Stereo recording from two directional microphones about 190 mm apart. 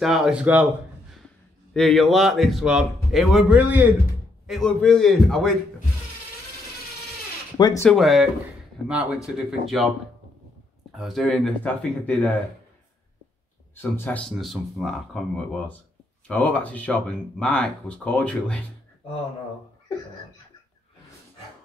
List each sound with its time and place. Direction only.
0.0 s a man's voice: centre (ahead or behind)
1.7 s a man's voice: 5° left (ahead or behind)
4.5 s a man's voice: centre (ahead or behind)
7.5 s speech: 20° left (ahead or behind)
7.8 s a man's voice: centre (ahead or behind)
11.0 s a man's voice: centre (ahead or behind)
13.7 s a man's voice: 10° left (ahead or behind)